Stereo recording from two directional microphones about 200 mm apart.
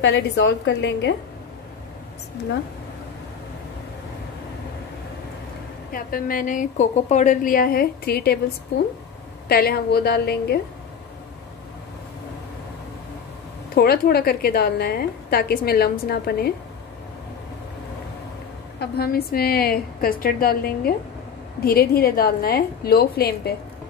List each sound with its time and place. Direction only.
0.0 s a woman's voice: 60° left (ahead or behind)
5.9 s a woman's voice: 45° left (ahead or behind)
9.5 s a woman's voice: 50° left (ahead or behind)
13.7 s a woman's voice: 50° left (ahead or behind)
18.8 s a woman's voice: 50° left (ahead or behind)